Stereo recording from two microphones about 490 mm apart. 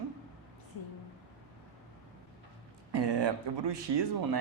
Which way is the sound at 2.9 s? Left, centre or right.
Right.